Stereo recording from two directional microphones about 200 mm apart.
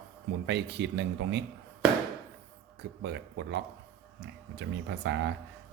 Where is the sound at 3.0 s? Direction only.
60° right (ahead or behind).